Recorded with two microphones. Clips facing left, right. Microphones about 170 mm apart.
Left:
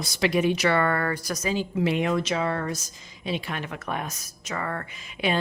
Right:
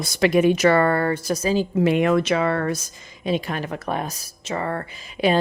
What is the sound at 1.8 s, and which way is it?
Speech, 55° right (ahead or behind).